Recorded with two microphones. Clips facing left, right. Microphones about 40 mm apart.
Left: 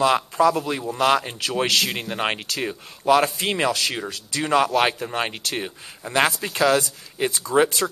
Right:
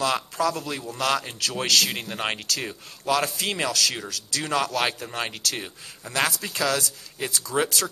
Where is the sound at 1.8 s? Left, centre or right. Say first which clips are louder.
Left 3 dB; centre.